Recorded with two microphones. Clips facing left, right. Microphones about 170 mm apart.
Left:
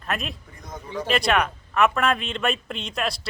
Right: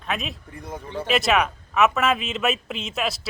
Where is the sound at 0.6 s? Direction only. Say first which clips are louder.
Right 1 dB; 30° right (ahead or behind).